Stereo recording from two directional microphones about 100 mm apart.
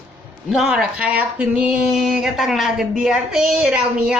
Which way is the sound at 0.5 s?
10° right (ahead or behind).